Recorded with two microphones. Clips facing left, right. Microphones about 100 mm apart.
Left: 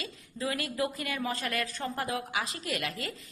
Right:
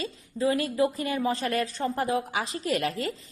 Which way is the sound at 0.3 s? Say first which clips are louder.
Right 8 dB; 30° right (ahead or behind).